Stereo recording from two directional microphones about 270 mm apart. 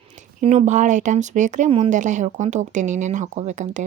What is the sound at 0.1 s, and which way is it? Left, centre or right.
Speech, right.